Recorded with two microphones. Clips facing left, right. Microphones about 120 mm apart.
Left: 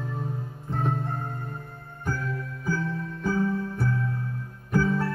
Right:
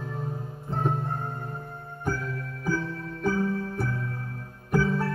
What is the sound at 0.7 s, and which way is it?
Music, 25° right (ahead or behind).